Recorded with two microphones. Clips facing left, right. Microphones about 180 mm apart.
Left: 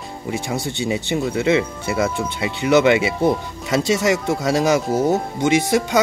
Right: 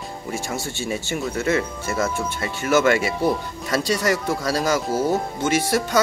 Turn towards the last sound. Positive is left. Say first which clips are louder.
# left 3 dB
turn(degrees=20)  # may be behind; listen again after turning